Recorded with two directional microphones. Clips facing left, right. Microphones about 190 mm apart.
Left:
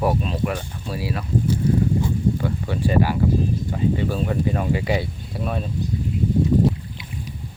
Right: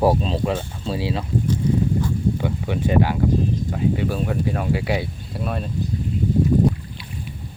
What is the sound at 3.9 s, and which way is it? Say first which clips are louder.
Speech: even; 5° right (ahead or behind).